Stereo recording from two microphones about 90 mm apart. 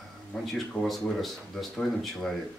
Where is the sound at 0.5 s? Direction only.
Centre (ahead or behind).